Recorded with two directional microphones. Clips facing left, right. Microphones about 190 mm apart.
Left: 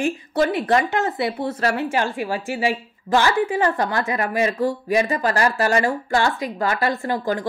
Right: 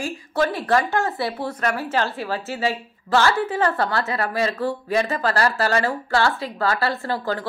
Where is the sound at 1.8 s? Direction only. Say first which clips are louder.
Left 1 dB; 15° left (ahead or behind).